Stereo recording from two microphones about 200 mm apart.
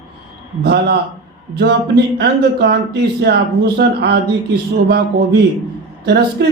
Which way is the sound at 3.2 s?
55° right (ahead or behind).